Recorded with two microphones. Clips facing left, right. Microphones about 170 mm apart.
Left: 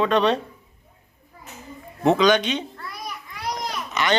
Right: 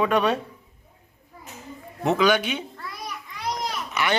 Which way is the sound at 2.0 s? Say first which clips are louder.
Left 3 dB; 5° right (ahead or behind).